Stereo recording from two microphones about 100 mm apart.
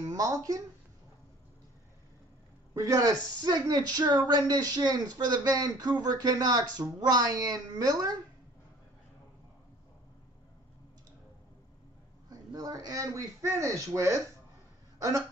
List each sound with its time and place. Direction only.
0.0 s speech: 35° right (ahead or behind)
2.7 s speech: 35° right (ahead or behind)
12.3 s speech: 40° right (ahead or behind)